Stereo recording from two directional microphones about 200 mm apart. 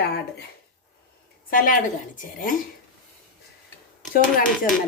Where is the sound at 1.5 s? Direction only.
45° left (ahead or behind).